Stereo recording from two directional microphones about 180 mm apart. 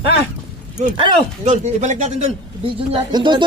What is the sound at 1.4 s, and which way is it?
Speech, 40° right (ahead or behind).